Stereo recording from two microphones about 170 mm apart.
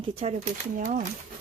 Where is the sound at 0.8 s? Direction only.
50° right (ahead or behind).